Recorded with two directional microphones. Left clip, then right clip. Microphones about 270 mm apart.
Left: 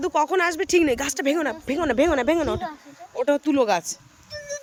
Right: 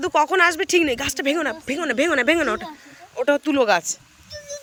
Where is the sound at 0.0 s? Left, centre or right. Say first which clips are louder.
Right 4 dB; centre.